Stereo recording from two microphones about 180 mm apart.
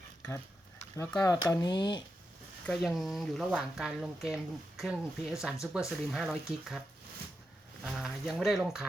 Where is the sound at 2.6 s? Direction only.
Centre (ahead or behind).